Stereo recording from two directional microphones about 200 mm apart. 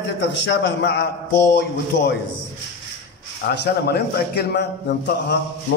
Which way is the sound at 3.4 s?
55° left (ahead or behind).